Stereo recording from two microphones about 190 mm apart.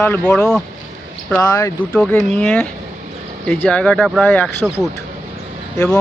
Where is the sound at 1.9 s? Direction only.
5° left (ahead or behind).